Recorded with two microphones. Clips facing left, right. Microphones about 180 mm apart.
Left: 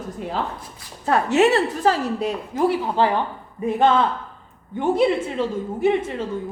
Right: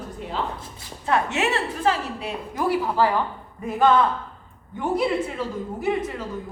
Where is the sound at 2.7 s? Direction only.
25° left (ahead or behind).